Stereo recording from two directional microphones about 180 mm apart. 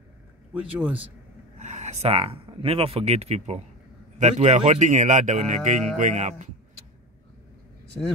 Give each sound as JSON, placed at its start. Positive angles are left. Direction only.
{"t": 0.6, "sound": "a man's voice", "side_deg": -5}
{"t": 1.6, "sound": "speech", "side_deg": -40}